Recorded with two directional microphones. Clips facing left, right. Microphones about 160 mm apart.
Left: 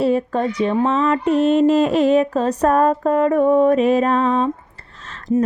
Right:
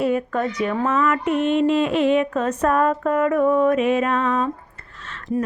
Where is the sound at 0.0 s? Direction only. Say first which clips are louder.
Left 3 dB; 30° left (ahead or behind).